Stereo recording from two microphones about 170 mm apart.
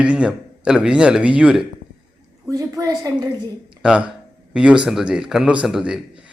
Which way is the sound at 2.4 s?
20° right (ahead or behind).